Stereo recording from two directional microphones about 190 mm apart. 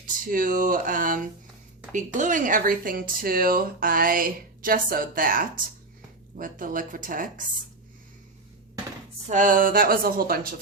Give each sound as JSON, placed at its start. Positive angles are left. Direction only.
{"t": 0.3, "sound": "speech", "side_deg": -45}
{"t": 9.2, "sound": "speech", "side_deg": -40}